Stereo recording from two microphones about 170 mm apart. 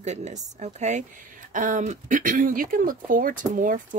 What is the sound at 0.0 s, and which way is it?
Speech, 45° right (ahead or behind).